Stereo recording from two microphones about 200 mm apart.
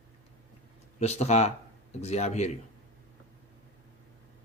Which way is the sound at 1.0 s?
35° left (ahead or behind).